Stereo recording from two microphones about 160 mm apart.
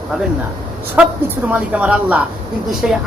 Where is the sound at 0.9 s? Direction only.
10° right (ahead or behind).